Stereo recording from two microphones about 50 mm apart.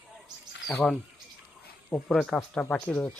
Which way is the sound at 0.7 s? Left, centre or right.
Centre.